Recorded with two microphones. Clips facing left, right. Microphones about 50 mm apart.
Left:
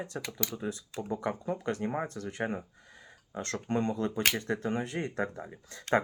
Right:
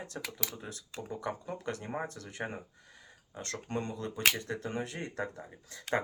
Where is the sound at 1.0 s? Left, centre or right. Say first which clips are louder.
Left 5 dB; left.